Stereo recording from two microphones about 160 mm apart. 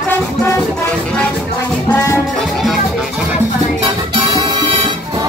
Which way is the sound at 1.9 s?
15° left (ahead or behind).